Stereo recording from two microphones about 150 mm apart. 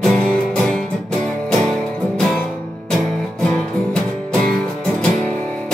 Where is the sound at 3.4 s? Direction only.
5° left (ahead or behind).